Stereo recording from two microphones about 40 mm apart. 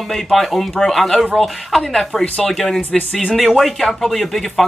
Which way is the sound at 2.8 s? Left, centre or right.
Left.